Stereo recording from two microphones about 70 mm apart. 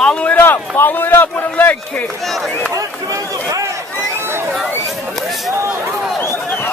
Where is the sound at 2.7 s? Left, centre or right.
Right.